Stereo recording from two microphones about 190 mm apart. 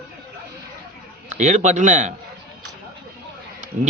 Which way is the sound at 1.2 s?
40° right (ahead or behind).